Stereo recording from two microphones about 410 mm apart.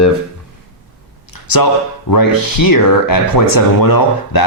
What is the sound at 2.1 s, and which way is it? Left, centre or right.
Speech, left.